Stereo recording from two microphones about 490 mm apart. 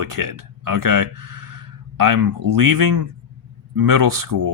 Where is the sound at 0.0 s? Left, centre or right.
Right.